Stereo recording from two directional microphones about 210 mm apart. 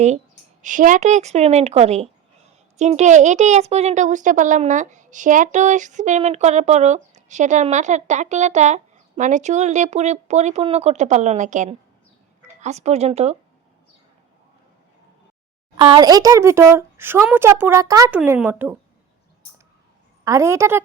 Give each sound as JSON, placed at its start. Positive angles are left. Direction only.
{"t": 0.6, "sound": "speech", "side_deg": -40}
{"t": 15.8, "sound": "speech", "side_deg": -20}
{"t": 20.2, "sound": "speech", "side_deg": -15}